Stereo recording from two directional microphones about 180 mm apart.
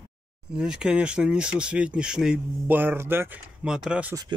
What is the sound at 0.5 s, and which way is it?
Speech, 5° right (ahead or behind).